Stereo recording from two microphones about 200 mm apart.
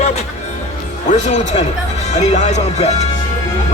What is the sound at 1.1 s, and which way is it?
Speech, 35° left (ahead or behind).